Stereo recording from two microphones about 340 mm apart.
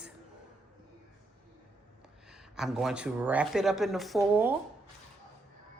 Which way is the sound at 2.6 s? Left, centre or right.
Centre.